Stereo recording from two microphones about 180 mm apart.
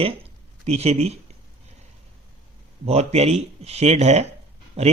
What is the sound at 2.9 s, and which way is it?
Speech, 35° right (ahead or behind).